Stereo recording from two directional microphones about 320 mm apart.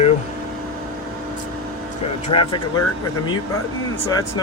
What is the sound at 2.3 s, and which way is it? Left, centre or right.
Speech, centre.